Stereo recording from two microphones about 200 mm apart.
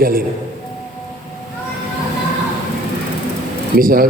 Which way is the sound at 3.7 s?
45° right (ahead or behind).